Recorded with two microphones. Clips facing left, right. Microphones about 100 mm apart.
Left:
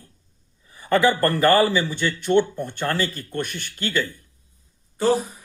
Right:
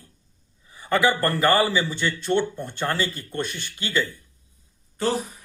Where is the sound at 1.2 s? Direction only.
15° right (ahead or behind).